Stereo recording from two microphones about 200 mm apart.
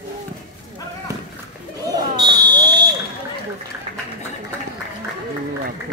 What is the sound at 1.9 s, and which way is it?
Fire alarm, 20° right (ahead or behind).